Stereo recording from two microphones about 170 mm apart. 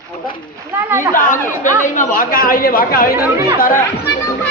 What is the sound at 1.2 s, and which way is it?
Speech, 50° left (ahead or behind).